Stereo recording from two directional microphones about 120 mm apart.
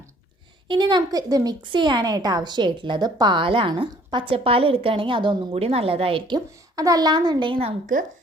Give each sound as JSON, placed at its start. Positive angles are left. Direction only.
{"t": 0.7, "sound": "a woman's voice", "side_deg": -40}
{"t": 5.5, "sound": "a woman's voice", "side_deg": -55}
{"t": 7.9, "sound": "a woman's voice", "side_deg": -90}